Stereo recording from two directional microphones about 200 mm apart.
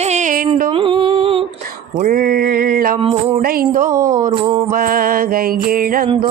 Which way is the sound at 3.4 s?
45° right (ahead or behind).